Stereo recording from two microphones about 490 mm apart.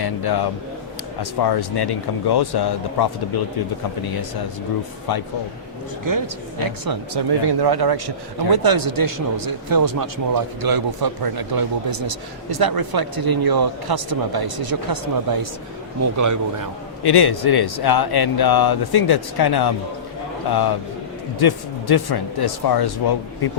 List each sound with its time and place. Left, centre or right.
0.0 s speech: left
5.1 s speech: left
6.1 s speech: right
17.0 s speech: left